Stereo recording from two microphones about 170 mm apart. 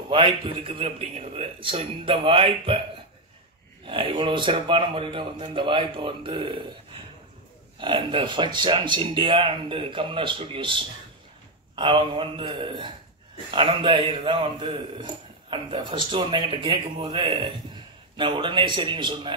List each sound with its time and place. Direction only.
0.1 s a man's voice: 30° right (ahead or behind)
3.8 s a man's voice: 30° right (ahead or behind)
7.8 s a man's voice: 30° right (ahead or behind)